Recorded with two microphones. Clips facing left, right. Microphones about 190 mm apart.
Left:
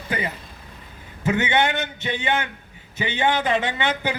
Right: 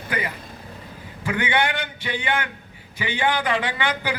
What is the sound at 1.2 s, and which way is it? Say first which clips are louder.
A man's voice: left 2 dB; 25° left (ahead or behind).